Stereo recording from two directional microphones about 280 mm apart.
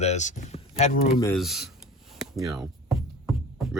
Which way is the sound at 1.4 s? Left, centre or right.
Centre.